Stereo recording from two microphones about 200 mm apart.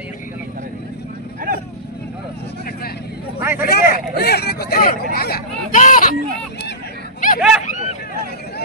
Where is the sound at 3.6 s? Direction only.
50° left (ahead or behind).